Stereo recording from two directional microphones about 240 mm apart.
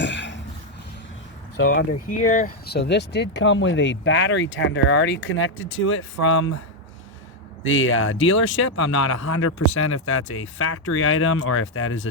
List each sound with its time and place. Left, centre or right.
0.0 s a sound: left
1.6 s speech: left
7.6 s speech: left
9.2 s speech: left